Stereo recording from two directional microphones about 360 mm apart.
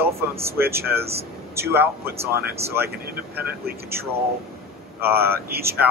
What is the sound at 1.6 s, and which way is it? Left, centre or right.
Speech, centre.